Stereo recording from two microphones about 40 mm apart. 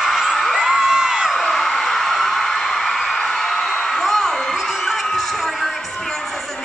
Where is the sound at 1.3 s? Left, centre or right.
Centre.